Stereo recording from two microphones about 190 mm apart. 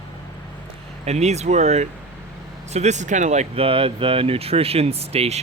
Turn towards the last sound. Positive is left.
turn(degrees=-30)  # may be behind; listen again after turning